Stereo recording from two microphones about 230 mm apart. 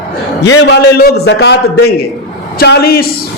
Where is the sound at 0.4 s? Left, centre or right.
Left.